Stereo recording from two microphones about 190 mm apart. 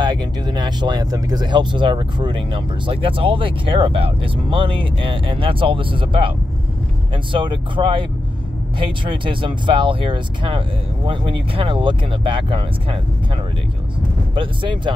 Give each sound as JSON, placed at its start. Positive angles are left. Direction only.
{"t": 0.0, "sound": "speech", "side_deg": -20}
{"t": 7.3, "sound": "speech", "side_deg": -25}
{"t": 14.3, "sound": "speech", "side_deg": -25}